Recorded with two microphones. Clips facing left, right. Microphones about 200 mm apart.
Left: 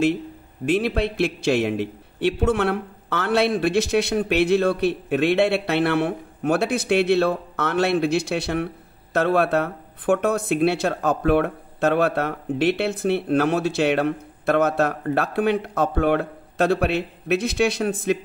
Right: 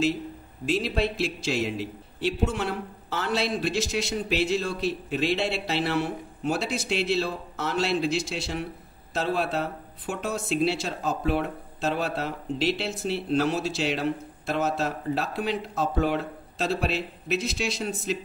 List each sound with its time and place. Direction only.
0.7 s speech: 60° left (ahead or behind)